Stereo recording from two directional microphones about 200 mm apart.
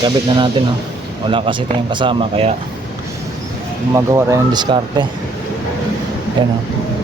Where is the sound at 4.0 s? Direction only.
15° right (ahead or behind).